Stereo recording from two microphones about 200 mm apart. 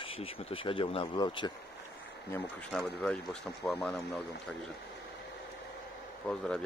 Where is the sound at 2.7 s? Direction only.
Centre (ahead or behind).